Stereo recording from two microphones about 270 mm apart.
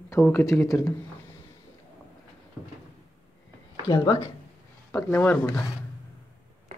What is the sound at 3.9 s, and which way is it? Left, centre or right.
Speech, centre.